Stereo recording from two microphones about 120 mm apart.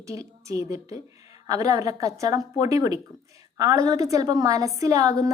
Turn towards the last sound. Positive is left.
turn(degrees=-30)  # may be behind; listen again after turning